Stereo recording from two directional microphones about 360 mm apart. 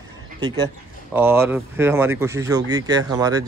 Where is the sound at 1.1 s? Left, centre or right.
Centre.